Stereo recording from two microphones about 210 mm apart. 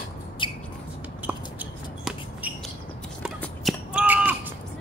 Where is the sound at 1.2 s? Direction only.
5° right (ahead or behind).